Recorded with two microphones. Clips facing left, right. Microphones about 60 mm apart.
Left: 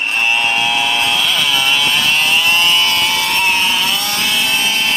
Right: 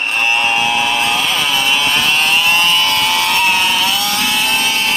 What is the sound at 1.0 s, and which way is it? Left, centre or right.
Chainsaw, right.